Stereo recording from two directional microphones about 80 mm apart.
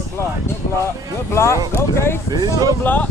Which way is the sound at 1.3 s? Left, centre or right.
Left.